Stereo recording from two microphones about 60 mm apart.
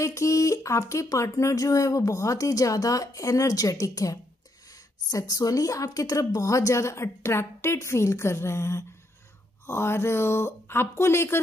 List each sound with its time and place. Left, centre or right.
0.0 s speech: left
5.1 s a woman's voice: left